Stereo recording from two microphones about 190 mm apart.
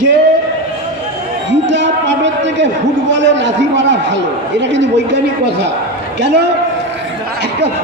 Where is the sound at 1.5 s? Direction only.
70° right (ahead or behind).